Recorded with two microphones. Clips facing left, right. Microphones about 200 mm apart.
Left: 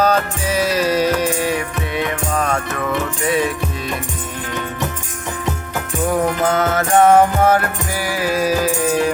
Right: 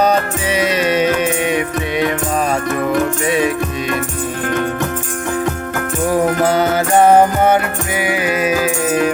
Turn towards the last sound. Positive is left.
turn(degrees=-30)  # may be behind; listen again after turning